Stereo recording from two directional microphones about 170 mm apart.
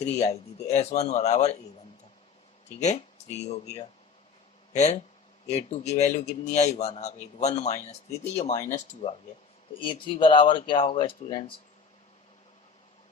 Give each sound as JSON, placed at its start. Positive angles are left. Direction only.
{"t": 0.0, "sound": "a man's voice", "side_deg": 40}
{"t": 2.8, "sound": "a man's voice", "side_deg": 40}
{"t": 9.8, "sound": "speech", "side_deg": 30}